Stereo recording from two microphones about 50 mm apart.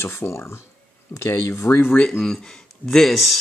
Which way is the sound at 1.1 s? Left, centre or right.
Left.